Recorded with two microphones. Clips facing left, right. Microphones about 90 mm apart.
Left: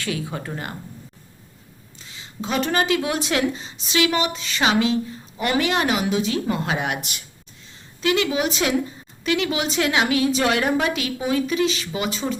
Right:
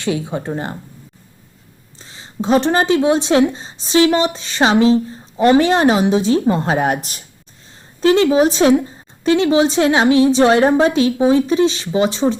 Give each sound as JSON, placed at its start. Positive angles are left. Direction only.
{"t": 0.0, "sound": "speech", "side_deg": -25}
{"t": 2.0, "sound": "a woman's voice", "side_deg": -35}